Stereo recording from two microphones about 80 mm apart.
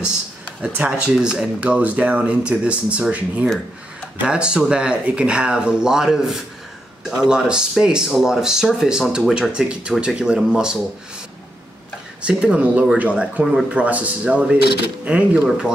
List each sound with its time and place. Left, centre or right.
0.6 s speech: centre
12.2 s speech: centre